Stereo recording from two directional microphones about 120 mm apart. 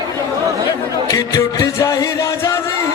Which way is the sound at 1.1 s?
25° left (ahead or behind).